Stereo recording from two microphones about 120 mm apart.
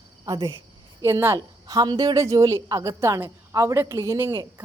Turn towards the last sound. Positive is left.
turn(degrees=-25)  # may be behind; listen again after turning